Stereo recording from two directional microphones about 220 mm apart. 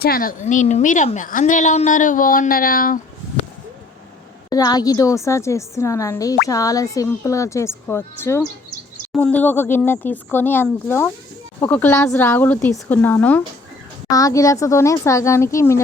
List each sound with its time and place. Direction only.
0.0 s a woman's voice: 40° left (ahead or behind)
4.4 s a woman's voice: 15° left (ahead or behind)